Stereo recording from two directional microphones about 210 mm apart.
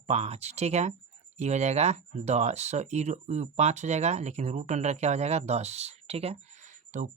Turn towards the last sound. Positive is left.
turn(degrees=-35)  # may be behind; listen again after turning